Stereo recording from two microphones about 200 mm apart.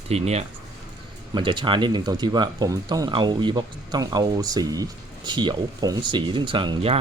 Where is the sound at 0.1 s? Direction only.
30° right (ahead or behind).